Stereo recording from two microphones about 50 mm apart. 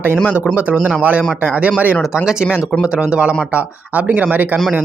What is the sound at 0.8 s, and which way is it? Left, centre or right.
Speech, centre.